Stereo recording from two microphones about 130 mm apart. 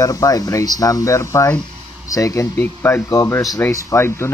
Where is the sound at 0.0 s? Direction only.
25° left (ahead or behind).